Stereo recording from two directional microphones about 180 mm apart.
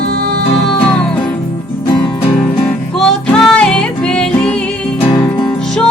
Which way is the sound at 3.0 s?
5° left (ahead or behind).